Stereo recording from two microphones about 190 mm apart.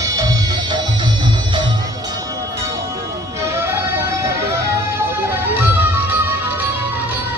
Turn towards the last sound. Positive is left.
turn(degrees=-10)  # may be behind; listen again after turning